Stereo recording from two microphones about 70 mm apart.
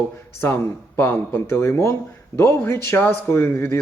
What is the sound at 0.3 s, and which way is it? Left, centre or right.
Speech, left.